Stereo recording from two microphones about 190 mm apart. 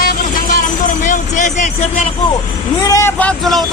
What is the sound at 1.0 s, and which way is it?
Speech, 40° left (ahead or behind).